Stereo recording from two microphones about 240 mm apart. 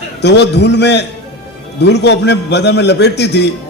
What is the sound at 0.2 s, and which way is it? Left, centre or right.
A man's voice, left.